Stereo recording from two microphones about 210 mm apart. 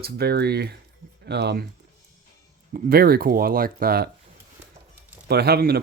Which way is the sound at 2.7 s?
45° right (ahead or behind).